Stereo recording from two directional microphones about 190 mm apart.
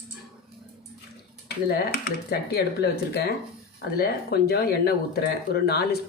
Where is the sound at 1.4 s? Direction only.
55° left (ahead or behind).